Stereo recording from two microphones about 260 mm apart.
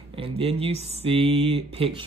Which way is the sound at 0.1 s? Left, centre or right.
Right.